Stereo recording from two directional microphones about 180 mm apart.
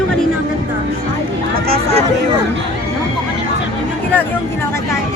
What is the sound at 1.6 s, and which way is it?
Speech, 35° right (ahead or behind).